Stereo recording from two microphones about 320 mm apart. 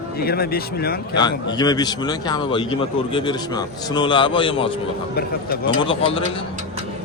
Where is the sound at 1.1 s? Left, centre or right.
Centre.